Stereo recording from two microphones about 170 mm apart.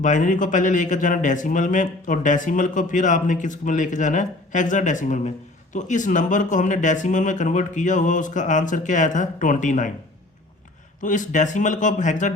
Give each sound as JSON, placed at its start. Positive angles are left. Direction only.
{"t": 0.0, "sound": "speech", "side_deg": 50}
{"t": 11.0, "sound": "speech", "side_deg": 50}